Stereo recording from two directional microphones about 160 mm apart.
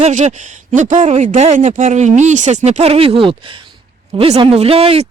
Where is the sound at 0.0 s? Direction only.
50° right (ahead or behind).